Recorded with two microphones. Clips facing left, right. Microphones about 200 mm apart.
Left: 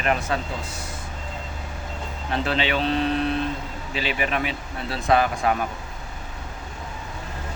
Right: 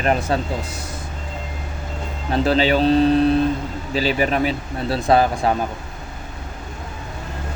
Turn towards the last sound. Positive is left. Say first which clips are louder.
# right 4 dB
turn(degrees=-30)  # may be behind; listen again after turning